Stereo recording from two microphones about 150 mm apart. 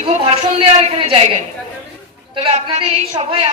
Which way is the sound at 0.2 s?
40° right (ahead or behind).